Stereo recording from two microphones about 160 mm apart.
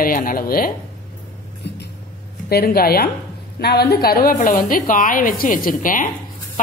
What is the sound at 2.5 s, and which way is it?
Speech, 70° left (ahead or behind).